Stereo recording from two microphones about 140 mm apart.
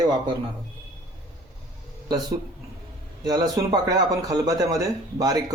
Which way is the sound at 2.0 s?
25° right (ahead or behind).